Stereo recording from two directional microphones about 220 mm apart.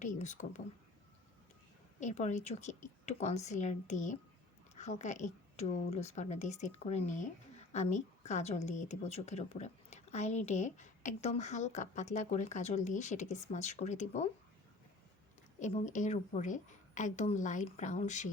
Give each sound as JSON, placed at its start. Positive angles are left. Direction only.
{"t": 0.0, "sound": "a woman's voice", "side_deg": 35}
{"t": 2.0, "sound": "a woman's voice", "side_deg": 35}
{"t": 15.6, "sound": "a woman's voice", "side_deg": 35}